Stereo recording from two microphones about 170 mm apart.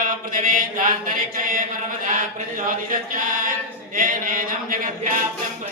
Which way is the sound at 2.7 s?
55° right (ahead or behind).